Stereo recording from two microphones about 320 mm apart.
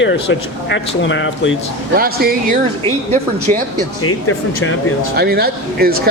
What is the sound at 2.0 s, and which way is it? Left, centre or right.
Speech, right.